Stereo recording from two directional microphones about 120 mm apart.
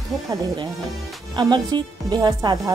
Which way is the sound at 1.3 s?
40° right (ahead or behind).